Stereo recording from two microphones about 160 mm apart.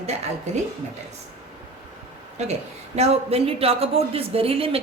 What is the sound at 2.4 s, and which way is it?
A woman's voice, 45° right (ahead or behind).